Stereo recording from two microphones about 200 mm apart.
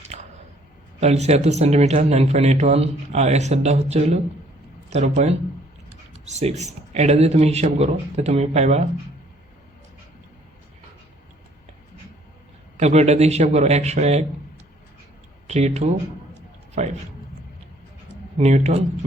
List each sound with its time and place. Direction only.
0.1 s a sound: 35° right (ahead or behind)
0.9 s speech: 35° right (ahead or behind)
12.7 s speech: 35° right (ahead or behind)
15.4 s speech: 35° right (ahead or behind)
18.3 s speech: 35° right (ahead or behind)